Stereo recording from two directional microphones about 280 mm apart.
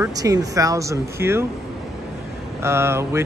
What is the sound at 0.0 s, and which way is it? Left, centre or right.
Speech, centre.